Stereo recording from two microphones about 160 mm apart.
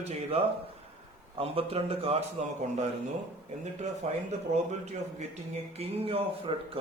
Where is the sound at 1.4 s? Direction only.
40° right (ahead or behind).